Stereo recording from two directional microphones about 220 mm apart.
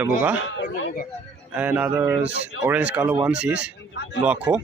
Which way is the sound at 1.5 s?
5° right (ahead or behind).